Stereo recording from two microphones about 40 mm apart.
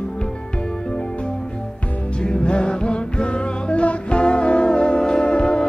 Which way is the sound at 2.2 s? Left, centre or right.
Left.